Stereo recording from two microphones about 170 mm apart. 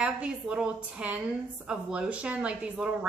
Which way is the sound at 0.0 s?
5° right (ahead or behind).